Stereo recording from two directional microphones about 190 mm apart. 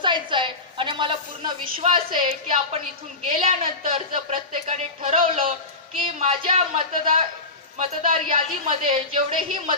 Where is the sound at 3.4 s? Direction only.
30° right (ahead or behind).